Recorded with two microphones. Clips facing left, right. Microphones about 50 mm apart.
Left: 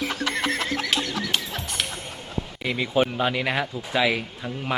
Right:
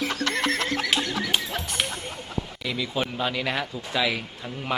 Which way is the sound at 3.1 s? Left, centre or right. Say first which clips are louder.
Left 3 dB; centre.